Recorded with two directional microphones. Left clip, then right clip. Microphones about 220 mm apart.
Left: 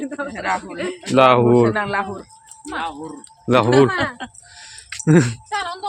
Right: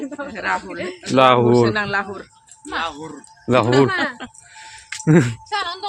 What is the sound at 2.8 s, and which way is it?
Speech, 10° right (ahead or behind).